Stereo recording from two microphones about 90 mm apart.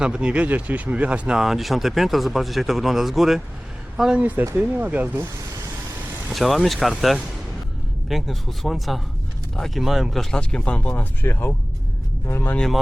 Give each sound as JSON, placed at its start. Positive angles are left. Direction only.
{"t": 0.0, "sound": "speech", "side_deg": -10}
{"t": 4.2, "sound": "speech", "side_deg": -20}
{"t": 6.3, "sound": "speech", "side_deg": 0}
{"t": 8.1, "sound": "speech", "side_deg": 0}
{"t": 12.5, "sound": "speech", "side_deg": 5}